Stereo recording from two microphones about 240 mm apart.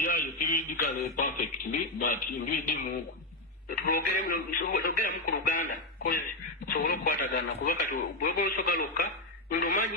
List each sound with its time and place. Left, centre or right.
0.0 s radio: left
1.1 s speech: left